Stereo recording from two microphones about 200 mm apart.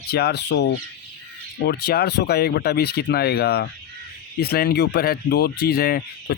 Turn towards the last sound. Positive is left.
turn(degrees=50)  # may be behind; listen again after turning